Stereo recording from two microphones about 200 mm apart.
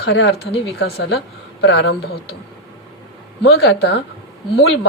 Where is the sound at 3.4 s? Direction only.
55° left (ahead or behind).